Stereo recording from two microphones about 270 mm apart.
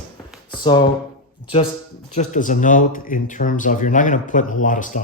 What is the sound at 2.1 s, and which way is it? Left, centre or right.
Speech, left.